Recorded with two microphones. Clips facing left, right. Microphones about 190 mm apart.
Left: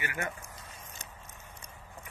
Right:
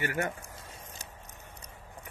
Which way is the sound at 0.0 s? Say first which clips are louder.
Right 5 dB; 40° right (ahead or behind).